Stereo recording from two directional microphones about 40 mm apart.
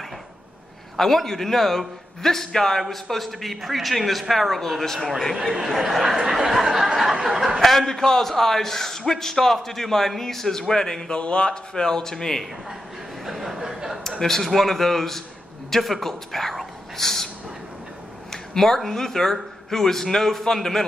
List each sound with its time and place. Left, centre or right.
0.9 s a man's voice: centre
11.1 s speech: left
11.7 s a man's voice: centre
13.2 s a sound: centre
14.1 s a man's voice: centre
18.3 s a sound: centre
18.8 s a man's voice: centre